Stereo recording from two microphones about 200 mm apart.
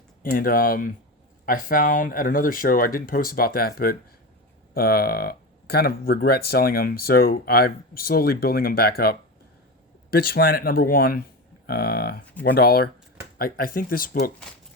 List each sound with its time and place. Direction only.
0.2 s speech: 45° left (ahead or behind)